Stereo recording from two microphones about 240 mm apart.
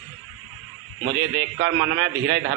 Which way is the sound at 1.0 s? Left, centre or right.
Right.